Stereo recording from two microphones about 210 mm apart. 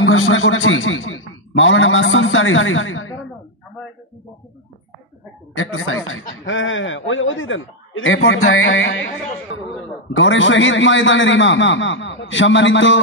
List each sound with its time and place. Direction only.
0.0 s a man's voice: 70° left (ahead or behind)
5.6 s a man's voice: 70° left (ahead or behind)